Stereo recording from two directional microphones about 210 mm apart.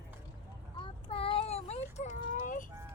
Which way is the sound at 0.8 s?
25° left (ahead or behind).